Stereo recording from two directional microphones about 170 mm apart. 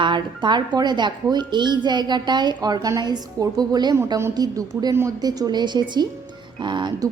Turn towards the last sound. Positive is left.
turn(degrees=-25)  # may be behind; listen again after turning